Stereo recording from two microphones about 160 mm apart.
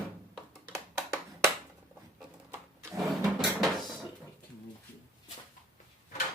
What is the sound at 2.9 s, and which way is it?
Dishes, centre (ahead or behind).